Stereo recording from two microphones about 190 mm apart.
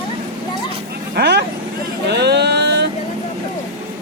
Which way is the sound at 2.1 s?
60° right (ahead or behind).